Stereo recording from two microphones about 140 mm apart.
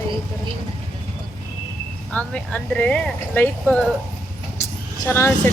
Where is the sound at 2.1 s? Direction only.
10° left (ahead or behind).